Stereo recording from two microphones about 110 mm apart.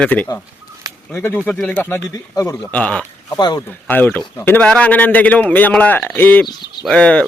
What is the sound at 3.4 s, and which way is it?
Speech, 40° left (ahead or behind).